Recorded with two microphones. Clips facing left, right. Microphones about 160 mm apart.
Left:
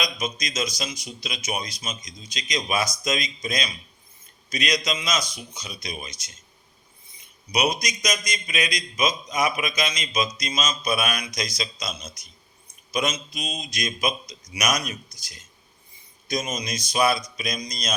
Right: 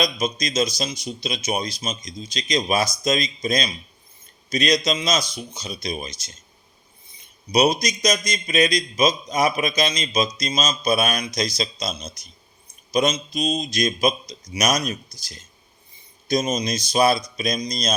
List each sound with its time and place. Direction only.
0.0 s a man's voice: 30° right (ahead or behind)
7.5 s a man's voice: 30° right (ahead or behind)